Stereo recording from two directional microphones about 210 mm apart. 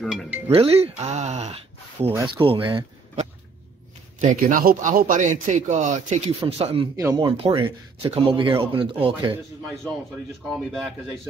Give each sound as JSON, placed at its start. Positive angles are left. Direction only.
{"t": 0.0, "sound": "music", "side_deg": 0}
{"t": 0.5, "sound": "speech", "side_deg": -30}
{"t": 4.2, "sound": "a man's voice", "side_deg": -40}
{"t": 10.5, "sound": "speech", "side_deg": 0}